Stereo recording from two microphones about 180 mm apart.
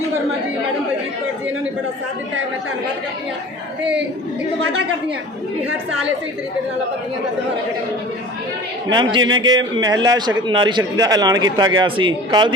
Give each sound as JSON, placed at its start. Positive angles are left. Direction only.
{"t": 8.9, "sound": "a man's voice", "side_deg": -25}